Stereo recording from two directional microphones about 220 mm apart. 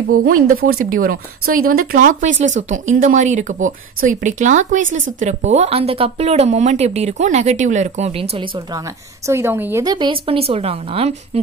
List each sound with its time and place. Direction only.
0.2 s speech: 40° right (ahead or behind)
9.3 s speech: 10° right (ahead or behind); by 11.4 s 25° right (ahead or behind)